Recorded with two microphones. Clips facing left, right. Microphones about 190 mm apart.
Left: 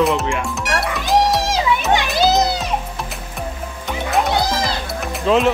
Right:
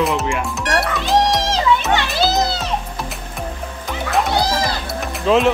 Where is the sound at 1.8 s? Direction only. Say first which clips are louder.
Left 2 dB; 15° left (ahead or behind).